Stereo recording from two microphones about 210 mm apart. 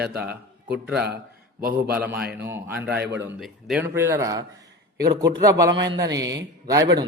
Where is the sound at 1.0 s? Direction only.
50° right (ahead or behind).